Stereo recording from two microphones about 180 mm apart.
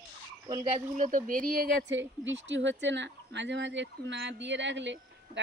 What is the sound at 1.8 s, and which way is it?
Speech, 90° right.